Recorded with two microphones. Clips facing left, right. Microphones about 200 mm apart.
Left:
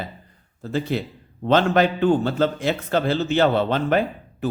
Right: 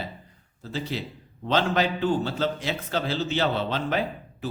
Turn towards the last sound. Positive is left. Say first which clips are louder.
# left 7 dB
turn(degrees=55)  # may be behind; listen again after turning